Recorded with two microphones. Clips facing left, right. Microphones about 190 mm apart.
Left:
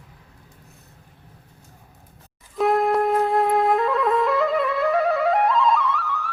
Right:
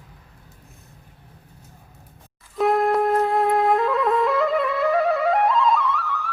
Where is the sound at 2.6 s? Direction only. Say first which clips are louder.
Even; centre (ahead or behind).